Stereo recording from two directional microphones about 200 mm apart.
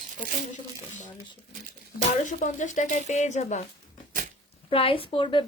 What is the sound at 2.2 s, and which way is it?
Speech, 40° left (ahead or behind).